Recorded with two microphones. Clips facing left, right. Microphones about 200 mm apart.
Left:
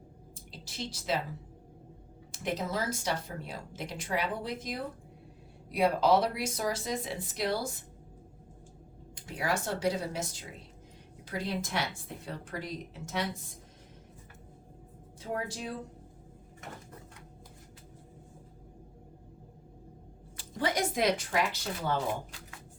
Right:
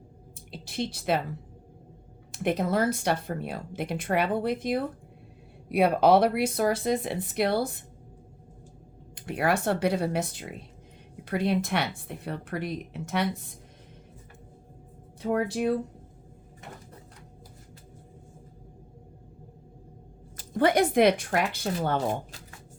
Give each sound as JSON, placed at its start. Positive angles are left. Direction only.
{"t": 0.5, "sound": "speech", "side_deg": -60}
{"t": 2.3, "sound": "speech", "side_deg": -60}
{"t": 9.1, "sound": "speech", "side_deg": -60}
{"t": 15.2, "sound": "speech", "side_deg": -65}
{"t": 20.3, "sound": "a sound", "side_deg": -45}
{"t": 20.6, "sound": "speech", "side_deg": -60}